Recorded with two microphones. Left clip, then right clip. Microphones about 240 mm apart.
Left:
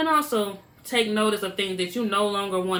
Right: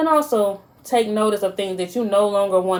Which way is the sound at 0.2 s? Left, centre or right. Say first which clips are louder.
Right 6 dB; centre.